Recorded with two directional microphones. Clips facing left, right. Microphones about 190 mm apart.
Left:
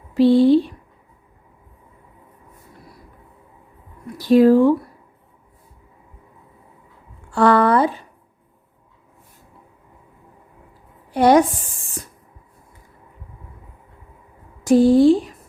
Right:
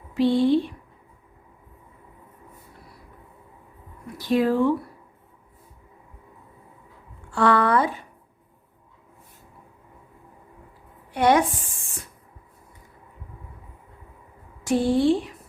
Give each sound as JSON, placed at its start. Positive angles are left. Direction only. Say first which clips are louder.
{"t": 0.1, "sound": "speech", "louder": "left 6 dB", "side_deg": 35}
{"t": 4.2, "sound": "speech", "louder": "left 8 dB", "side_deg": 35}
{"t": 7.3, "sound": "speech", "louder": "left 5 dB", "side_deg": 35}
{"t": 11.1, "sound": "a woman's voice", "louder": "left 6 dB", "side_deg": 35}
{"t": 14.6, "sound": "speech", "louder": "left 8 dB", "side_deg": 40}